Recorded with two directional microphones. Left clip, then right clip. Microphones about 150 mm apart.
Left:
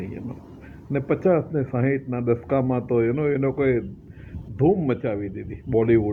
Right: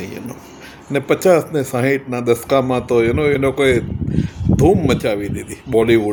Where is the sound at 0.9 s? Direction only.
35° right (ahead or behind).